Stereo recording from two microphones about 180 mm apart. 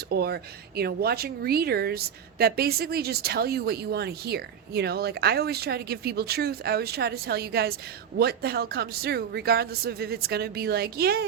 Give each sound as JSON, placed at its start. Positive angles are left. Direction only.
{"t": 0.1, "sound": "a woman's voice", "side_deg": -60}